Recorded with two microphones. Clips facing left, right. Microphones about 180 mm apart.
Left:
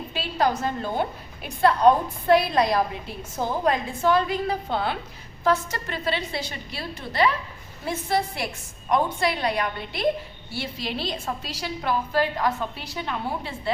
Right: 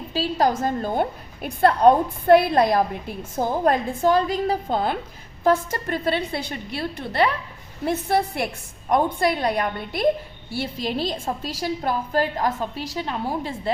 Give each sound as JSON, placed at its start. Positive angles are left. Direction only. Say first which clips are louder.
{"t": 0.1, "sound": "a woman's voice", "louder": "right 3 dB", "side_deg": -40}
{"t": 3.7, "sound": "a woman's voice", "louder": "right 2 dB", "side_deg": -40}